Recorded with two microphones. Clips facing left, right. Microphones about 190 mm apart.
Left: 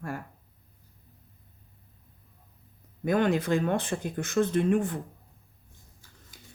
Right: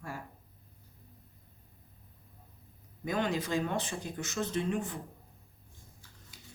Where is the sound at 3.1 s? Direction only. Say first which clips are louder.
Left 7 dB; 55° left (ahead or behind).